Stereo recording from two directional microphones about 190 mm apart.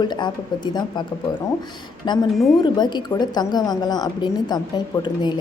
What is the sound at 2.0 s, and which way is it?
A woman's voice, 25° left (ahead or behind).